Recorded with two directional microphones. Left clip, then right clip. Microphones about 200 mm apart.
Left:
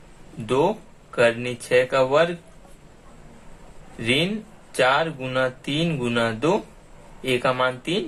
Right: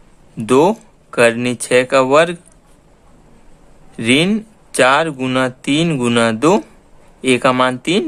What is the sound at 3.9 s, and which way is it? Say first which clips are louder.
Speech: right 8 dB; 45° right (ahead or behind).